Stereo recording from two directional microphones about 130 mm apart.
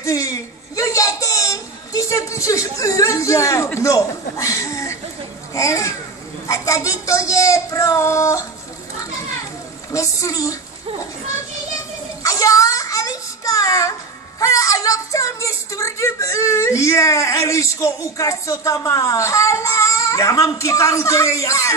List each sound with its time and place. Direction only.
0.0 s a man's voice: 25° left (ahead or behind)
9.9 s speech: 25° left (ahead or behind)
12.2 s child singing: 25° left (ahead or behind)
14.4 s speech: 25° left (ahead or behind)